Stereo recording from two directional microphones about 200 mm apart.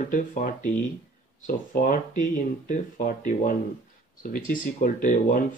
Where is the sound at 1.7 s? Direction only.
40° left (ahead or behind).